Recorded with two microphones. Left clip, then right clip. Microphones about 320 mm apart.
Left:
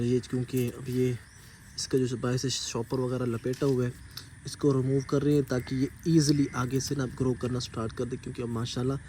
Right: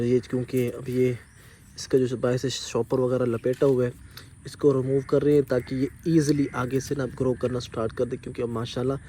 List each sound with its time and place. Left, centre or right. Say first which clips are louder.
0.0 s speech: right 5 dB; centre